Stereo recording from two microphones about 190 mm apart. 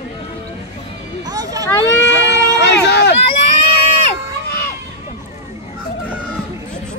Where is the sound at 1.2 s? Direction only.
20° right (ahead or behind).